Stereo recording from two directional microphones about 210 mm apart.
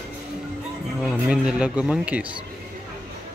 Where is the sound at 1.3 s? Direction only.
5° right (ahead or behind).